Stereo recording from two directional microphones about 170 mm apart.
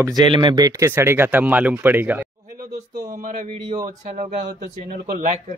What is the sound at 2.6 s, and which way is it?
Speech, 45° right (ahead or behind).